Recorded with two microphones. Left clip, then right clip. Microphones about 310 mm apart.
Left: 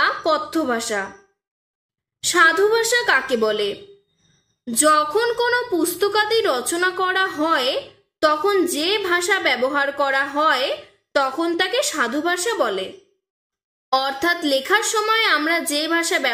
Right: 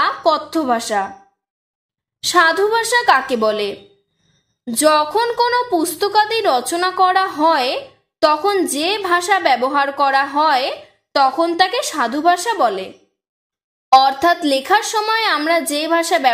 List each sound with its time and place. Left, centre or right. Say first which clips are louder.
0.0 s speech: right 3 dB; centre
2.2 s a woman's voice: right 2 dB; right
13.9 s speech: right 8 dB; centre